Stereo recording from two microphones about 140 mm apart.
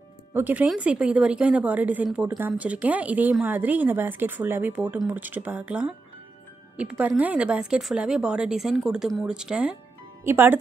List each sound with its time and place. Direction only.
0.3 s speech: 10° right (ahead or behind)